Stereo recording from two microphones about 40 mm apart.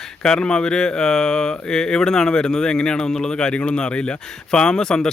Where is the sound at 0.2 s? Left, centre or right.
Centre.